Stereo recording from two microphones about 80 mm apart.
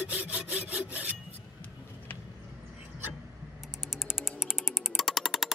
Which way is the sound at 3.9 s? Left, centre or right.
Centre.